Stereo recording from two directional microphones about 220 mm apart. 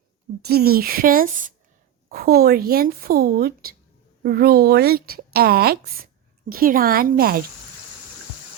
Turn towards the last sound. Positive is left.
turn(degrees=-40)  # may be behind; listen again after turning